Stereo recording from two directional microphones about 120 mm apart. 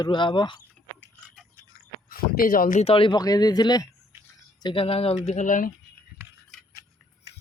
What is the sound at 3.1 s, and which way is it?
Speech, 30° left (ahead or behind).